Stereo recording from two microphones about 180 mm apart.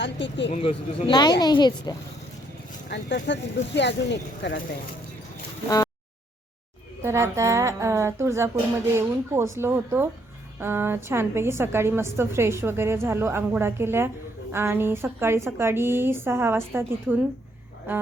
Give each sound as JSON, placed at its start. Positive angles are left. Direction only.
{"t": 0.0, "sound": "speech", "side_deg": 80}
{"t": 0.5, "sound": "speech", "side_deg": 35}
{"t": 1.1, "sound": "a woman's voice", "side_deg": 25}
{"t": 2.9, "sound": "speech", "side_deg": 75}
{"t": 5.6, "sound": "a sound", "side_deg": 20}
{"t": 7.0, "sound": "a woman's voice", "side_deg": -15}